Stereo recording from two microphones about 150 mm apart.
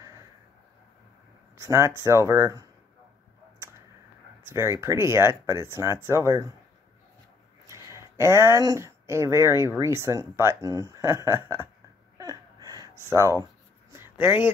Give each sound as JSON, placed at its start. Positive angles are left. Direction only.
{"t": 1.6, "sound": "speech", "side_deg": -20}
{"t": 4.5, "sound": "speech", "side_deg": -15}
{"t": 7.6, "sound": "speech", "side_deg": -20}
{"t": 12.2, "sound": "a sound", "side_deg": -25}